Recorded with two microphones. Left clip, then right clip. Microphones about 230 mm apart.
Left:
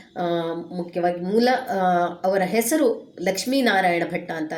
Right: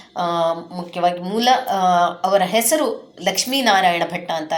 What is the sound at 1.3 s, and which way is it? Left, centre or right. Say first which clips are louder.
Speech: right 2 dB; right.